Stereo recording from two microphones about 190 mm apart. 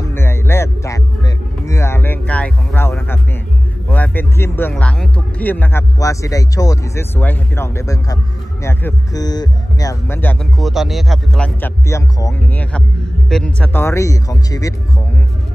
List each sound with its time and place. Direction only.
0.0 s music: 10° left (ahead or behind)
3.9 s speech: 10° left (ahead or behind)
10.6 s speech: centre (ahead or behind); by 14.7 s 20° left (ahead or behind)